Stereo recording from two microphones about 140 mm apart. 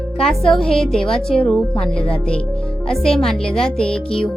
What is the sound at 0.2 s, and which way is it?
A woman's voice, 5° left (ahead or behind).